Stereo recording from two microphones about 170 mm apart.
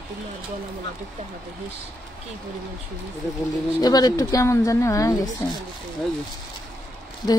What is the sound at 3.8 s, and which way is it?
Speech, 20° left (ahead or behind).